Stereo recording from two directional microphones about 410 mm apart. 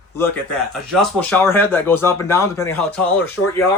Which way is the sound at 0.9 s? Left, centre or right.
Centre.